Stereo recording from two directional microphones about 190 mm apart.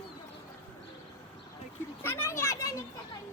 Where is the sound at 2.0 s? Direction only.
15° left (ahead or behind).